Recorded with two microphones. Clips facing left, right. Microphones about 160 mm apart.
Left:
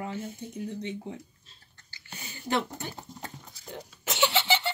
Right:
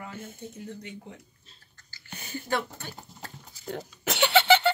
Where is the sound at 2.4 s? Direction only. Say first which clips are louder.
Left 2 dB; 20° left (ahead or behind).